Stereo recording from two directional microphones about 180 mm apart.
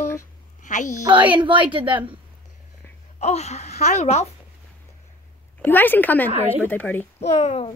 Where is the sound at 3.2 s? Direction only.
35° left (ahead or behind).